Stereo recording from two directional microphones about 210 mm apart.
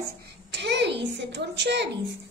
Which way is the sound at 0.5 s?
55° right (ahead or behind).